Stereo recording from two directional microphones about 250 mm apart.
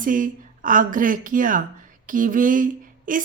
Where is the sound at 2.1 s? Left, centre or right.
Right.